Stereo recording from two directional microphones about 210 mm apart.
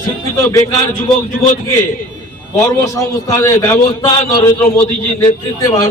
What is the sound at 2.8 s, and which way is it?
A man's voice, 15° left (ahead or behind).